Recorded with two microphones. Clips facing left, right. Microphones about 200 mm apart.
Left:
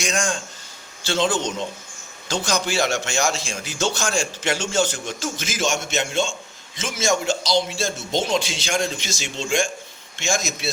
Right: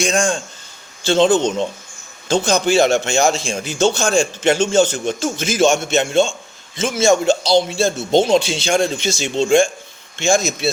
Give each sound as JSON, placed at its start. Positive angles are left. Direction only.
{"t": 0.0, "sound": "a man's voice", "side_deg": -30}
{"t": 5.6, "sound": "a man's voice", "side_deg": -60}
{"t": 6.7, "sound": "a man's voice", "side_deg": -30}